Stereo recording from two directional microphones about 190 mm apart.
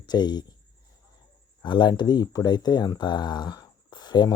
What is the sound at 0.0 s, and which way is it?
Speech, 20° left (ahead or behind).